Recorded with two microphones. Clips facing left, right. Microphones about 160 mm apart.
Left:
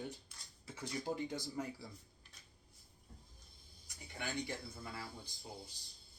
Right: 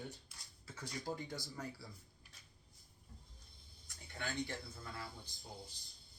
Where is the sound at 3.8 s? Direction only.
15° left (ahead or behind).